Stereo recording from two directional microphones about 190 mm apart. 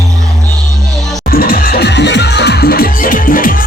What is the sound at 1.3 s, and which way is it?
Music, 50° left (ahead or behind).